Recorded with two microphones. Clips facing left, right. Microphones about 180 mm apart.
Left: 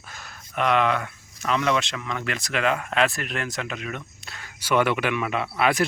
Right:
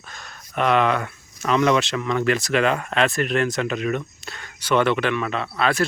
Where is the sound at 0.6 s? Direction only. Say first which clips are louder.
Right 2 dB; 40° right (ahead or behind).